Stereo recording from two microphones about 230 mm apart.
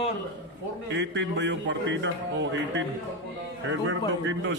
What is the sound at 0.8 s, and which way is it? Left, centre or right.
A man's voice, right.